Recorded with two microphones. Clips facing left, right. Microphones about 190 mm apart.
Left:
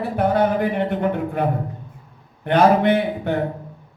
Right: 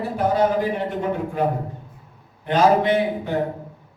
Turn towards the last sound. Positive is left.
turn(degrees=60)  # may be behind; listen again after turning